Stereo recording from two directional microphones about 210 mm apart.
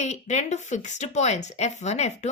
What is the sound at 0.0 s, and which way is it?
A woman's voice, 35° left (ahead or behind).